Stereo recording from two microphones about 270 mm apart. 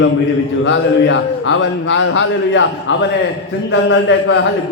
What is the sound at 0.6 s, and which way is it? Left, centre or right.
Speech, left.